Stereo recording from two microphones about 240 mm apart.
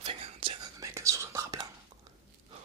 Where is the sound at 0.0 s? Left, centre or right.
Right.